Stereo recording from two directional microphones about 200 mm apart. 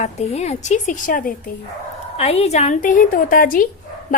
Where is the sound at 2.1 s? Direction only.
30° left (ahead or behind).